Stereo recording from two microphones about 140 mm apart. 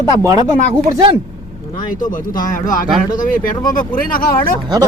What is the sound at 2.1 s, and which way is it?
Speech, 70° left (ahead or behind).